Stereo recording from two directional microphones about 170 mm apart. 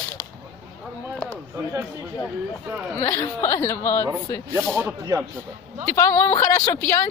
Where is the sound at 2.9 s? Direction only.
15° left (ahead or behind).